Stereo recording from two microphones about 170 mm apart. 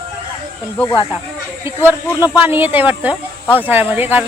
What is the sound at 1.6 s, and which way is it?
Speech, 15° right (ahead or behind).